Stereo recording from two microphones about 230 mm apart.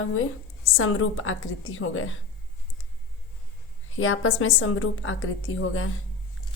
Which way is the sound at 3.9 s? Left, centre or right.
Left.